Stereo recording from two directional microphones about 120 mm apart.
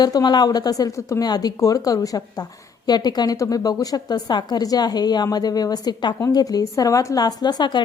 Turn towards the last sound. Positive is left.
turn(degrees=35)  # may be behind; listen again after turning